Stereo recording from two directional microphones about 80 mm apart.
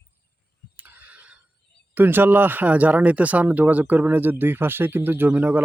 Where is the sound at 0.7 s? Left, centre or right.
Right.